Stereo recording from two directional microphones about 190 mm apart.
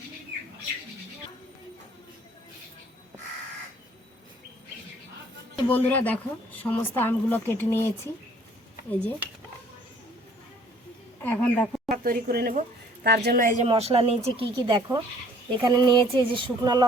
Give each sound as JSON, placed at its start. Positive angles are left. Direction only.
{"t": 5.6, "sound": "speech", "side_deg": 10}
{"t": 11.2, "sound": "speech", "side_deg": 10}
{"t": 11.9, "sound": "speech", "side_deg": -50}
{"t": 13.7, "sound": "speech", "side_deg": -30}